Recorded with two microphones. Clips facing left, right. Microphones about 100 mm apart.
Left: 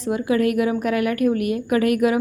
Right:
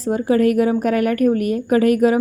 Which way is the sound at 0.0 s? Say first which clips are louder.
Right 4 dB; 35° right (ahead or behind).